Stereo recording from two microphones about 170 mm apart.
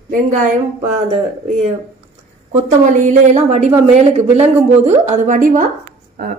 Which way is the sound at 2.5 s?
45° right (ahead or behind).